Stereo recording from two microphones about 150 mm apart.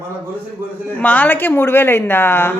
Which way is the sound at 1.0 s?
10° left (ahead or behind).